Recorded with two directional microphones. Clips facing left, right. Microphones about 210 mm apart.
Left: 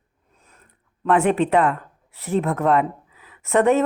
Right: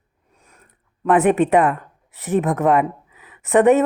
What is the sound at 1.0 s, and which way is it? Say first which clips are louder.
Speech: right 3 dB; 20° right (ahead or behind).